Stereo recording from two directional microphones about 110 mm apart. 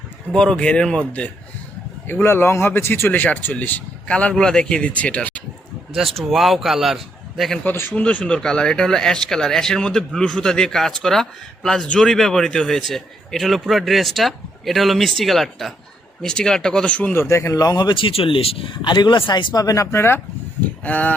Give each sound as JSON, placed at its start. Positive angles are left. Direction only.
{"t": 0.3, "sound": "speech", "side_deg": 10}
{"t": 2.0, "sound": "speech", "side_deg": 20}
{"t": 5.9, "sound": "speech", "side_deg": 0}
{"t": 7.6, "sound": "speech", "side_deg": 20}